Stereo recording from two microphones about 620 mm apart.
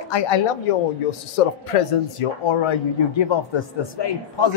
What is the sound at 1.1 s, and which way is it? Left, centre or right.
A man's voice, left.